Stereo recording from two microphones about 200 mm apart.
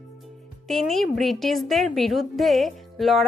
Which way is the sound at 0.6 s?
Centre (ahead or behind).